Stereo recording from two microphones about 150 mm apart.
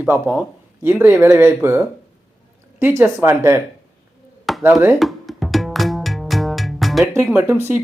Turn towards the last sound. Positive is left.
turn(degrees=-15)  # may be behind; listen again after turning